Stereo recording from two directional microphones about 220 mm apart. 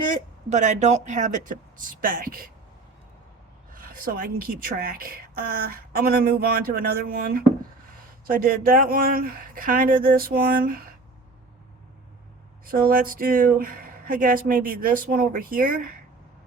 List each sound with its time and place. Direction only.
0.1 s a woman's voice: 35° right (ahead or behind)
3.7 s a woman's voice: 40° right (ahead or behind)
12.6 s a woman's voice: 40° right (ahead or behind)